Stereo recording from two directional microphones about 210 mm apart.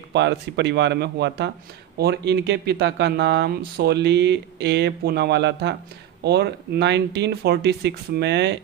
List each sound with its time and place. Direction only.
0.1 s speech: 55° right (ahead or behind)